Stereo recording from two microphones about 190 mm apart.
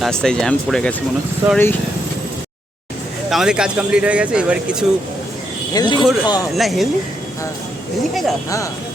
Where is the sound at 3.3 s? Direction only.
5° right (ahead or behind).